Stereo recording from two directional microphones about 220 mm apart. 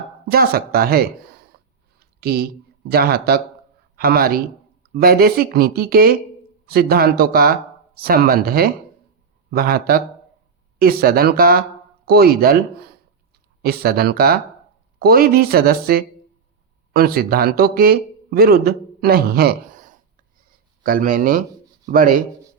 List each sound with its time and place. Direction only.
0.3 s speech: 45° right (ahead or behind)
1.5 s a sound: 45° right (ahead or behind)
2.9 s a man's voice: 45° right (ahead or behind)